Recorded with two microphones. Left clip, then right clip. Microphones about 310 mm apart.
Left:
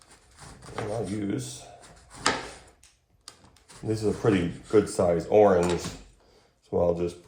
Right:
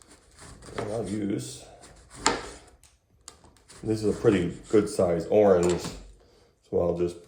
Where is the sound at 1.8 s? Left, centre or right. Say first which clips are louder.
Left 1 dB; centre.